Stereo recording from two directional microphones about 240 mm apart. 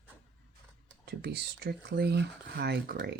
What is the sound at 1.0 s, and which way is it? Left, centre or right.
Speech, right.